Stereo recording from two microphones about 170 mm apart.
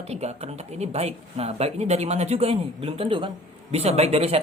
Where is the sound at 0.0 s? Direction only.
40° right (ahead or behind).